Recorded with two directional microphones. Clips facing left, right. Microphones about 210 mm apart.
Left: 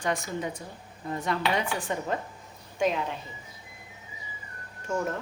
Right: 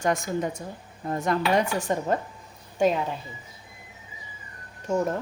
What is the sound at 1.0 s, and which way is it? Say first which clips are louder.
A woman's voice: right 4 dB; 45° right (ahead or behind).